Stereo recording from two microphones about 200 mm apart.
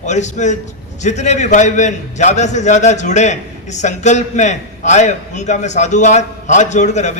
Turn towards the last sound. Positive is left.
turn(degrees=35)  # may be behind; listen again after turning